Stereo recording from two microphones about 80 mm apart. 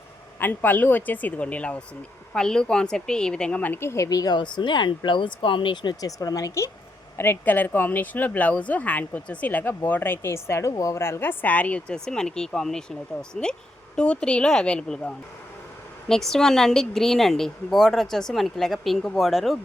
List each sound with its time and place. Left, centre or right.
0.3 s speech: left
3.6 s speech: left
4.4 s speech: left
6.0 s speech: left
7.2 s speech: left; by 19.5 s centre